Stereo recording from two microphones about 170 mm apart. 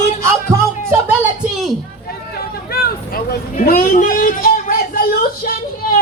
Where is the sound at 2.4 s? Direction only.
65° left (ahead or behind).